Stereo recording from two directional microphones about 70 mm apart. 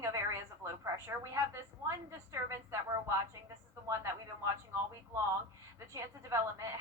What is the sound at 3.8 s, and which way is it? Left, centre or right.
Speech, right.